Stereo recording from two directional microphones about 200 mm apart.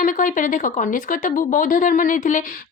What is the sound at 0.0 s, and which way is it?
Speech, 40° left (ahead or behind).